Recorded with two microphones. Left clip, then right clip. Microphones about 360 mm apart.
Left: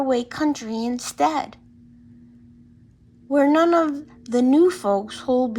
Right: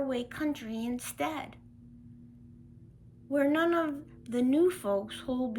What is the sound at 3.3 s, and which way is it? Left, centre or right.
Speech, centre.